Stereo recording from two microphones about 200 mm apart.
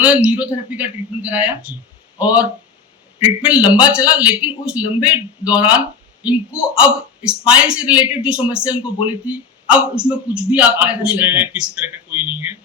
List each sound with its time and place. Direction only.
0.0 s a man's voice: 5° right (ahead or behind)